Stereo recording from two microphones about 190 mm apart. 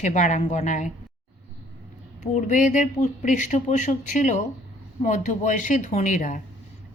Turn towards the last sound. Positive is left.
turn(degrees=40)  # may be behind; listen again after turning